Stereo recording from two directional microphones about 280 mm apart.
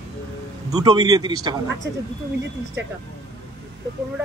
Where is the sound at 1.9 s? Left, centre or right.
Right.